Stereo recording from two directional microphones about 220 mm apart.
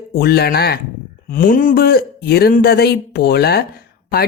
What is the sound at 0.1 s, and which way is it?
A man's voice, 45° left (ahead or behind).